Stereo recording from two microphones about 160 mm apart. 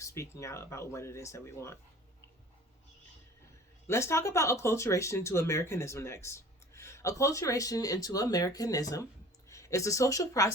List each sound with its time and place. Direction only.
0.0 s speech: 20° left (ahead or behind)
3.8 s speech: 15° left (ahead or behind)